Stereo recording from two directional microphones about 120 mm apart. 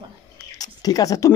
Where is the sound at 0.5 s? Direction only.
30° left (ahead or behind).